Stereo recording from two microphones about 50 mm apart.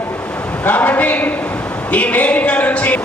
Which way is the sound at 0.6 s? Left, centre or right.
Left.